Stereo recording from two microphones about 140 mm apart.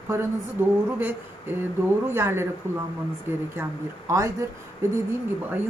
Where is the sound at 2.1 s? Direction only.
15° right (ahead or behind).